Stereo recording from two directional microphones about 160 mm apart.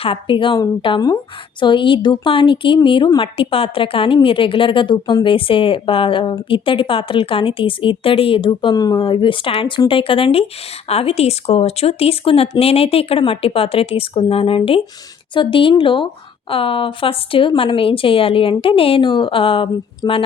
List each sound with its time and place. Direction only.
0.0 s a woman's voice: 35° left (ahead or behind)